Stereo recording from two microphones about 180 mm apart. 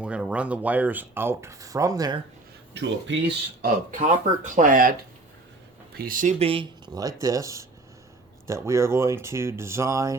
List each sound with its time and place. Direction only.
0.0 s speech: 5° right (ahead or behind); by 2.2 s 20° right (ahead or behind)
2.7 s speech: 85° right
3.6 s speech: 45° right (ahead or behind)
6.0 s speech: 50° right (ahead or behind)
6.4 s speech: 30° right (ahead or behind)